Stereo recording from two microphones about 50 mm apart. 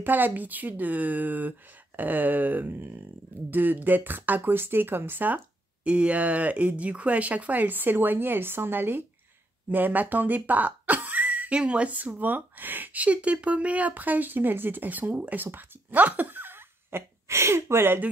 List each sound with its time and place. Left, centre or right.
0.0 s speech: right
5.9 s speech: right
12.2 s speech: right
15.4 s a sound: right
17.3 s speech: right